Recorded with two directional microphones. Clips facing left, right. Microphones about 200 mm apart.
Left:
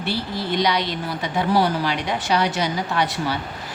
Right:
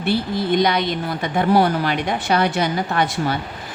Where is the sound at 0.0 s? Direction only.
50° right (ahead or behind).